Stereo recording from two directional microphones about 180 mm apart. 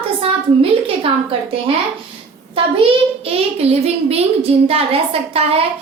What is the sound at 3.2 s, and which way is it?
A child's voice, 35° right (ahead or behind).